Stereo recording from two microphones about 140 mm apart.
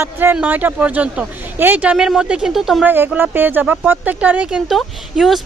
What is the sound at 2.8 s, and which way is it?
Speech, 15° right (ahead or behind).